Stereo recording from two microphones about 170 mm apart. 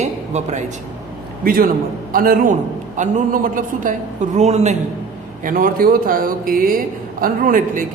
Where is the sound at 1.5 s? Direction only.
60° right (ahead or behind); by 4.8 s 40° right (ahead or behind).